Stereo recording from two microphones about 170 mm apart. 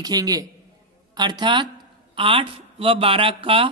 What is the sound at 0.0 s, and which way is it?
A man's voice, 20° right (ahead or behind).